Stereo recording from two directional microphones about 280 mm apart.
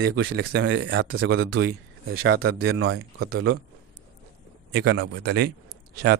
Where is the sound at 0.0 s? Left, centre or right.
Right.